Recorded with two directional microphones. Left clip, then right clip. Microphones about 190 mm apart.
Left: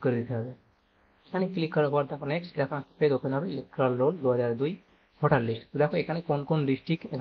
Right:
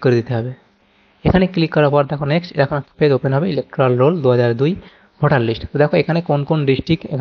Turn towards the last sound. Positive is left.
turn(degrees=-40)  # may be behind; listen again after turning